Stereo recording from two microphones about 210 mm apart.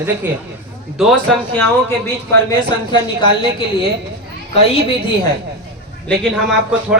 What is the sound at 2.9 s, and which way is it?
Speech, 20° left (ahead or behind).